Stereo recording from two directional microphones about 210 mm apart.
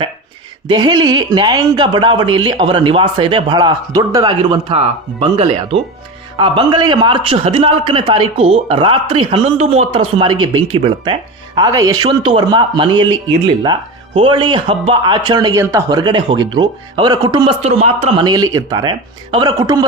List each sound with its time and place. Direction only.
0.7 s speech: 20° right (ahead or behind)
18.3 s speech: 20° right (ahead or behind)